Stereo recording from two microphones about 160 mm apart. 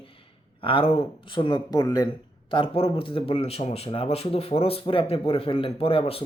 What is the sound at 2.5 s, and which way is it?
Speech, 35° left (ahead or behind).